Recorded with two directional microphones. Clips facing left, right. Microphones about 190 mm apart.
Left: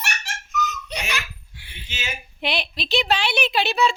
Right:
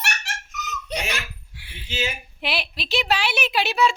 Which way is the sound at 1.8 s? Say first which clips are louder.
Right 9 dB; 35° right (ahead or behind).